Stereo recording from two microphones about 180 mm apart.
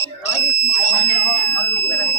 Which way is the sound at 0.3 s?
35° left (ahead or behind).